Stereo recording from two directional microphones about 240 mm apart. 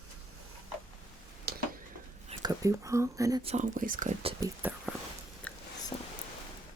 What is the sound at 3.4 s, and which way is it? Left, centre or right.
Speech, right.